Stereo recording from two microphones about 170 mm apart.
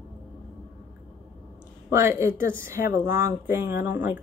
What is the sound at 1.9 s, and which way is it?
Speech, 15° right (ahead or behind).